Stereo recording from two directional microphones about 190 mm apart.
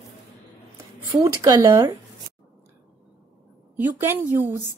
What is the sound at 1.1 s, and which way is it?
Speech, 15° right (ahead or behind).